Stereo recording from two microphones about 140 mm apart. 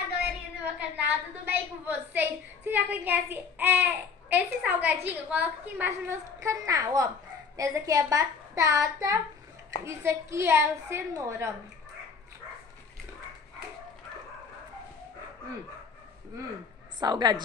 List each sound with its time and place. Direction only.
0.7 s a woman's voice: 10° right (ahead or behind)
17.0 s a woman's voice: 30° right (ahead or behind)